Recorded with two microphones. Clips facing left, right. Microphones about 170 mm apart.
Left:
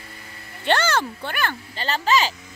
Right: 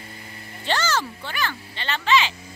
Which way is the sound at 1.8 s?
40° left (ahead or behind).